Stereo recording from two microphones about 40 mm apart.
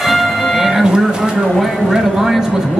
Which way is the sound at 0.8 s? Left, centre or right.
Centre.